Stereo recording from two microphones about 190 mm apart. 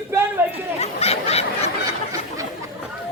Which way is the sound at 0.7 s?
35° left (ahead or behind).